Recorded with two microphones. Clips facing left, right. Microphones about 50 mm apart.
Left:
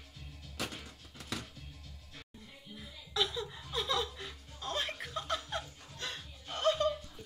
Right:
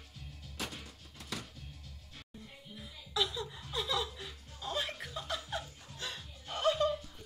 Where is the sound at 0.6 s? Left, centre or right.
Left.